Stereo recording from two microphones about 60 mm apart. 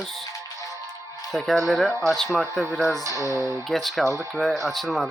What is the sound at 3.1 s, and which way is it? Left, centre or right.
Speech, left.